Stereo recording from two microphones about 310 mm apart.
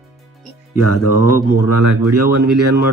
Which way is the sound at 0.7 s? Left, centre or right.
Left.